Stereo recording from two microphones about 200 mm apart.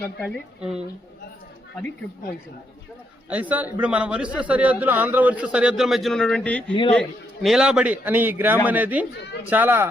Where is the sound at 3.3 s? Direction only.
10° right (ahead or behind).